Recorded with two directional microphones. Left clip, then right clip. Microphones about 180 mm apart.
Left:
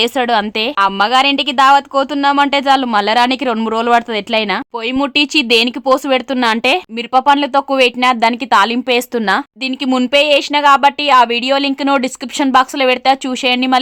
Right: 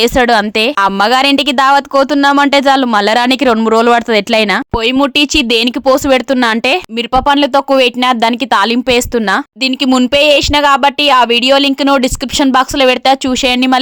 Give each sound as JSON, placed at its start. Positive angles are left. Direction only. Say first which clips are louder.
{"t": 0.0, "sound": "a woman's voice", "louder": "right 4 dB", "side_deg": -25}